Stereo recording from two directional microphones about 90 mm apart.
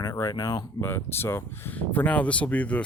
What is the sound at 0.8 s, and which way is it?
Speech, 25° left (ahead or behind).